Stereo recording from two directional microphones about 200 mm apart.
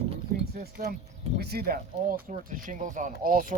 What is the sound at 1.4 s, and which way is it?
Speech, 50° right (ahead or behind).